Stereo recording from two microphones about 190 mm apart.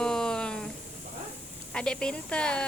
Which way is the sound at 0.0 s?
5° left (ahead or behind).